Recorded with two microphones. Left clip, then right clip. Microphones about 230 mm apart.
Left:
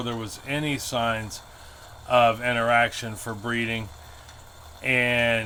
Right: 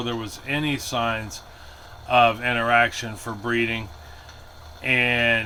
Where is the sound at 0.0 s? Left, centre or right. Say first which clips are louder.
Right 3 dB; left.